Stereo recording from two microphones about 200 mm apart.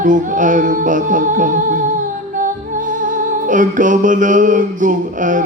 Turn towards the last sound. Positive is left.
turn(degrees=-40)  # may be behind; listen again after turning